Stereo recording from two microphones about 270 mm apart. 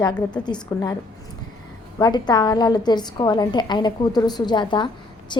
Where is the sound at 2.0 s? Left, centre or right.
Centre.